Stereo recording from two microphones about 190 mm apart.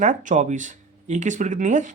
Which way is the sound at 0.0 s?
40° right (ahead or behind).